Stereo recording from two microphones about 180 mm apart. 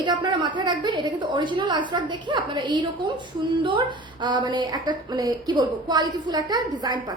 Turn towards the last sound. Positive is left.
turn(degrees=-20)  # may be behind; listen again after turning